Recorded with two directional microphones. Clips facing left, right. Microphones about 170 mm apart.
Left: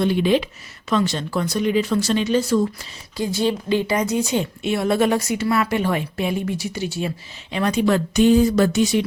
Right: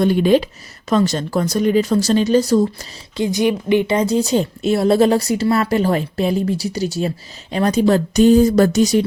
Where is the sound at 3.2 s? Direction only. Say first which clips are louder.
Right 4 dB; 20° right (ahead or behind).